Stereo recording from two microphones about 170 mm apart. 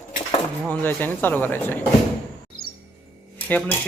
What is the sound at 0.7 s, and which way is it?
Speech, 10° left (ahead or behind).